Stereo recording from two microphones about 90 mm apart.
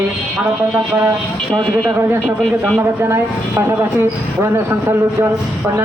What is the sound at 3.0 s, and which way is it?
Speech, 25° right (ahead or behind).